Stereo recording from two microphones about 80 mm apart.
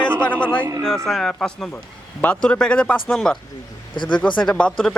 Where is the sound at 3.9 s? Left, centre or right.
Left.